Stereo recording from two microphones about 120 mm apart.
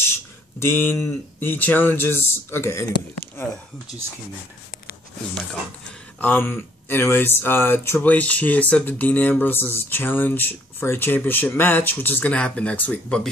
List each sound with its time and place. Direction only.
0.6 s speech: 20° left (ahead or behind)
6.1 s speech: 15° left (ahead or behind)